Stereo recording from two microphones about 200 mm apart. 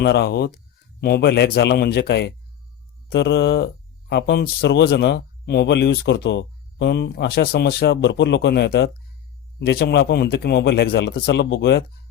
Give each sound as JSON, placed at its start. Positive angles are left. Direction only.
{"t": 0.0, "sound": "speech", "side_deg": 55}